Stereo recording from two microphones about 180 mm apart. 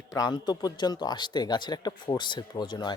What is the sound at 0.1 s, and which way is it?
Speech, 20° left (ahead or behind).